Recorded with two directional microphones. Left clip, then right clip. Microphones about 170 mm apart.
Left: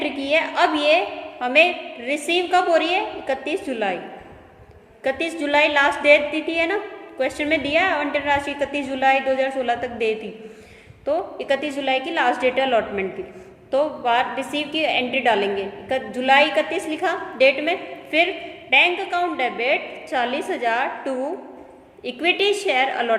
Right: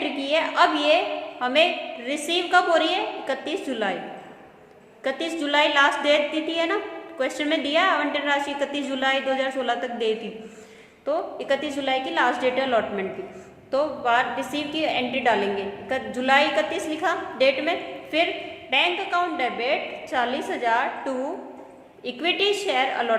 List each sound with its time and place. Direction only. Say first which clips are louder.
0.0 s a woman's voice: left 3 dB; 20° left (ahead or behind)
5.0 s a woman's voice: left 3 dB; 20° left (ahead or behind)